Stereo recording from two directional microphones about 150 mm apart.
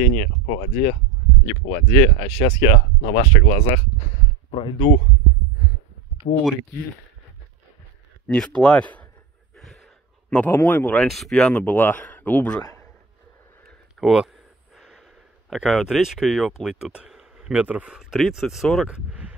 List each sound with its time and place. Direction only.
0.0 s speech: 50° left (ahead or behind)
1.7 s speech: 30° left (ahead or behind)
6.3 s speech: 55° left (ahead or behind)
8.3 s speech: 5° left (ahead or behind)
9.6 s a sound: centre (ahead or behind)
10.3 s speech: 10° left (ahead or behind)
13.7 s a sound: centre (ahead or behind)
15.5 s speech: centre (ahead or behind)